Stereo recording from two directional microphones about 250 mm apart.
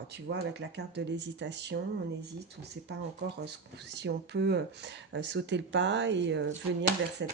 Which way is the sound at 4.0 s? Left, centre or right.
Right.